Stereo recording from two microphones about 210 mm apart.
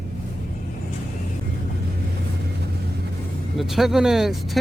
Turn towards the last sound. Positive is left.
turn(degrees=0)  # may be behind; listen again after turning